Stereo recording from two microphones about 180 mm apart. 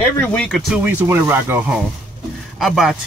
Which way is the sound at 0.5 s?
5° right (ahead or behind).